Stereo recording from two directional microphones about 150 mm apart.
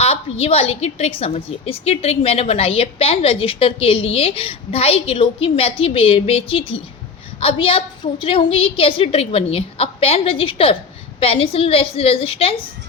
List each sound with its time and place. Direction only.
0.0 s a woman's voice: 40° left (ahead or behind)